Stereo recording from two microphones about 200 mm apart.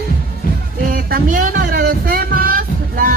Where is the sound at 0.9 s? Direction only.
45° right (ahead or behind).